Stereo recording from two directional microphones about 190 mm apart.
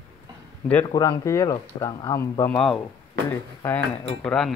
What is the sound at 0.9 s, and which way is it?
Speech, 20° left (ahead or behind).